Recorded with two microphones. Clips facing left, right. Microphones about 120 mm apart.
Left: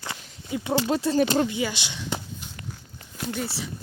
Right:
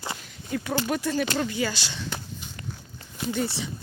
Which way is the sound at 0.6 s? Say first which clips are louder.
Left 4 dB; 25° left (ahead or behind).